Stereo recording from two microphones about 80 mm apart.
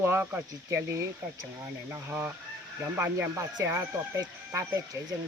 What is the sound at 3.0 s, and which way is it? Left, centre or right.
Speech, right.